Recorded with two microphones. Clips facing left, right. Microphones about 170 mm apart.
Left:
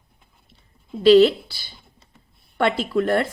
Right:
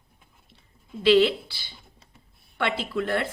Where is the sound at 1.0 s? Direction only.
40° left (ahead or behind).